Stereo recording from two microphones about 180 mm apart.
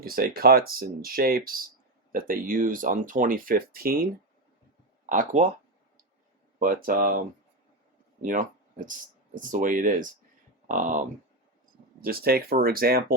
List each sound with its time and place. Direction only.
0.0 s speech: 55° right (ahead or behind)
5.0 s speech: 45° right (ahead or behind)
6.6 s speech: 50° right (ahead or behind)
8.2 s speech: 50° right (ahead or behind)
12.0 s speech: 55° right (ahead or behind)